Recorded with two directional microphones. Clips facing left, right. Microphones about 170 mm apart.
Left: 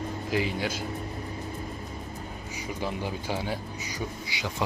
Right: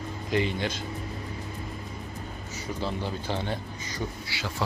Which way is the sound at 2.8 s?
10° left (ahead or behind).